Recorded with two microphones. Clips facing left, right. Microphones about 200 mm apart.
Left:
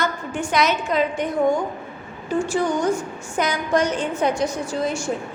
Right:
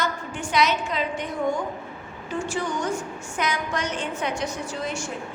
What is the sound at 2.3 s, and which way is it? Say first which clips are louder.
A woman's voice: left 7 dB; 40° left (ahead or behind).